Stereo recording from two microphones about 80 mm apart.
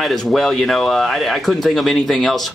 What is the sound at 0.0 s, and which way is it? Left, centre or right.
Speech, centre.